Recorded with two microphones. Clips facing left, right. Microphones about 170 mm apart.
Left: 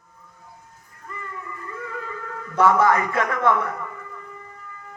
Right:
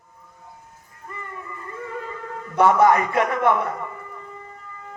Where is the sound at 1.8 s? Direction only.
25° right (ahead or behind).